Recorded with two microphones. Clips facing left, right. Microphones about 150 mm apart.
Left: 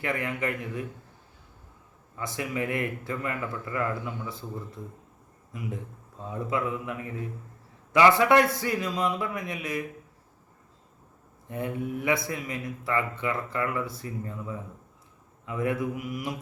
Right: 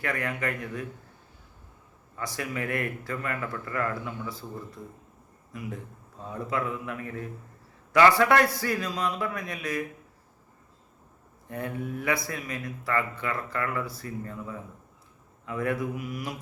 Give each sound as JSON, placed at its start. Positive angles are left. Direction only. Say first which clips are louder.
{"t": 0.0, "sound": "speech", "louder": "left 1 dB", "side_deg": 20}
{"t": 2.1, "sound": "speech", "louder": "left 2 dB", "side_deg": 20}
{"t": 5.5, "sound": "speech", "louder": "left 1 dB", "side_deg": 20}
{"t": 11.4, "sound": "speech", "louder": "left 2 dB", "side_deg": 20}